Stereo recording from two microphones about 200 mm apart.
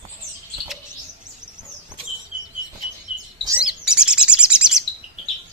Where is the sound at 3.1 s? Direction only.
30° left (ahead or behind).